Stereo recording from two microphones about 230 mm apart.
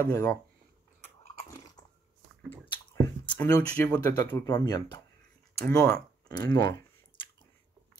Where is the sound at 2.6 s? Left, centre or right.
Centre.